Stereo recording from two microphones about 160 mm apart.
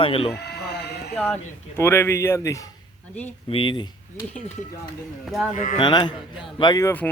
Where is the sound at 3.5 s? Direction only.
30° left (ahead or behind).